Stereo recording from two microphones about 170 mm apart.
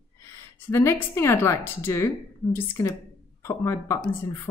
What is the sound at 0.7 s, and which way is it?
Speech, 15° left (ahead or behind).